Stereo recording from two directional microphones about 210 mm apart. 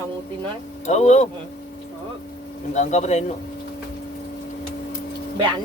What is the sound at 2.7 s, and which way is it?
Speech, 35° left (ahead or behind).